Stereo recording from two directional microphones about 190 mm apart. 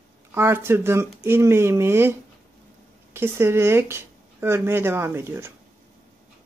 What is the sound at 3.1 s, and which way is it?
Speech, 15° right (ahead or behind).